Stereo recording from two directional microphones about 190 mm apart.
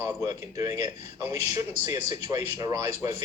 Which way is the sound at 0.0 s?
20° right (ahead or behind).